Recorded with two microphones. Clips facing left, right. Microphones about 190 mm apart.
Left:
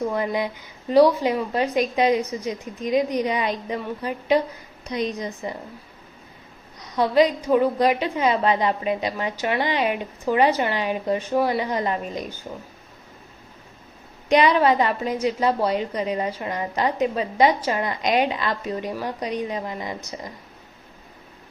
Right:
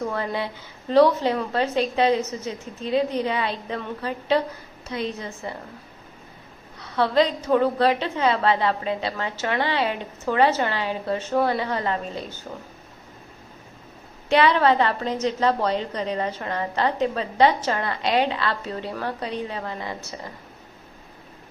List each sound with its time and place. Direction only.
0.0 s a woman's voice: 15° left (ahead or behind)
6.7 s a woman's voice: 15° left (ahead or behind)
14.3 s a woman's voice: 15° left (ahead or behind)